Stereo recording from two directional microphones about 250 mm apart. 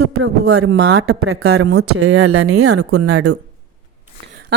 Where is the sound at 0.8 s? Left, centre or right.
Right.